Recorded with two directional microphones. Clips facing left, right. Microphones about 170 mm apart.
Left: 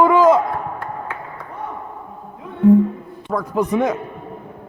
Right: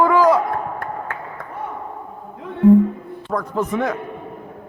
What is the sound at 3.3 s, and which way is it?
Speech, 5° left (ahead or behind).